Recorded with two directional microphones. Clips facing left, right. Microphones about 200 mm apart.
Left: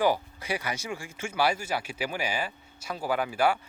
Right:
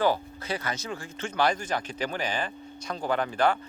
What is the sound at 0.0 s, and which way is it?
Speech, 10° left (ahead or behind).